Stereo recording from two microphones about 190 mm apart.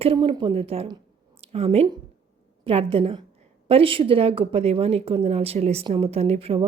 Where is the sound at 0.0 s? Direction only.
30° right (ahead or behind).